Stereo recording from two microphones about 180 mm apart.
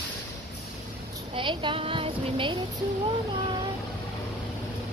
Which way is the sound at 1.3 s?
25° right (ahead or behind).